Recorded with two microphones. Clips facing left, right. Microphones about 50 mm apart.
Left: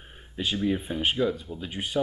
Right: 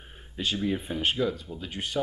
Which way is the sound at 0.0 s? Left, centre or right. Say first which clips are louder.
Left 1 dB; centre.